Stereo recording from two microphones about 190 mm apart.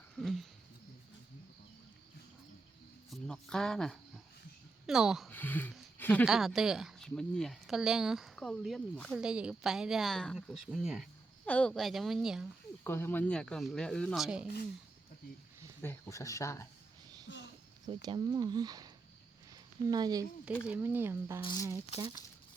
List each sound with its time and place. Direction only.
0.2 s speech: centre (ahead or behind)
3.1 s speech: 5° left (ahead or behind)
5.3 s speech: 10° left (ahead or behind)
6.2 s speech: centre (ahead or behind)
12.8 s speech: 10° left (ahead or behind); by 14.5 s 5° right (ahead or behind)
15.8 s speech: 15° left (ahead or behind)
17.3 s a sound: 75° left (ahead or behind)
17.8 s speech: 20° right (ahead or behind)
19.9 s speech: 20° right (ahead or behind)
20.7 s speech: 10° right (ahead or behind)
21.4 s speech: 20° left (ahead or behind)